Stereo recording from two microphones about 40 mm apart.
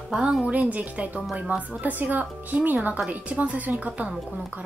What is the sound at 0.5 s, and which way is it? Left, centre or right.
Speech, right.